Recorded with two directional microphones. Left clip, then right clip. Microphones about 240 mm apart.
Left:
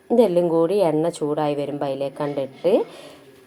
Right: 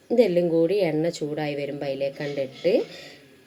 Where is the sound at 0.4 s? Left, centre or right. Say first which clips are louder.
Left 2 dB; left.